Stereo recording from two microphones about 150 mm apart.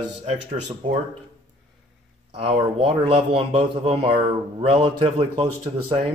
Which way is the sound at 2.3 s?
40° right (ahead or behind).